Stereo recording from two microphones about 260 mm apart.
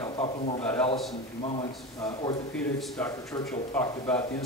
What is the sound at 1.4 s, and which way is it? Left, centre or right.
Speech, left.